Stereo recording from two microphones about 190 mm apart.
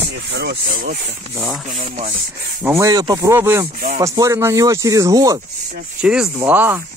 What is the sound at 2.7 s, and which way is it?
Speech, 15° right (ahead or behind).